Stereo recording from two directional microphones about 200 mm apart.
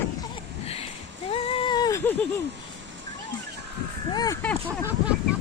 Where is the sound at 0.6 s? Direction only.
30° left (ahead or behind); by 2.2 s 10° left (ahead or behind).